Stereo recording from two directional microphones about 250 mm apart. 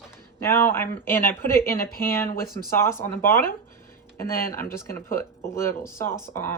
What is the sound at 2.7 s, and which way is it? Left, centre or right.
Speech, centre.